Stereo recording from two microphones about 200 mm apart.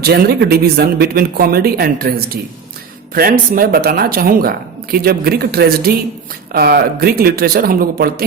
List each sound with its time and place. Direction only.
0.0 s speech: 55° right (ahead or behind)